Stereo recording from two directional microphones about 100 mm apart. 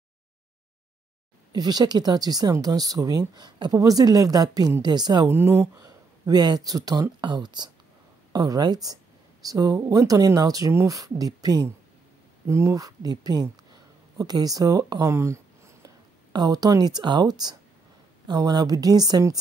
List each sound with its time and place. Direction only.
1.5 s speech: 40° right (ahead or behind)
5.3 s speech: 25° right (ahead or behind)
5.8 s speech: 40° right (ahead or behind)
7.2 s speech: 50° right (ahead or behind); by 15.9 s 30° right (ahead or behind)
16.3 s speech: 40° right (ahead or behind)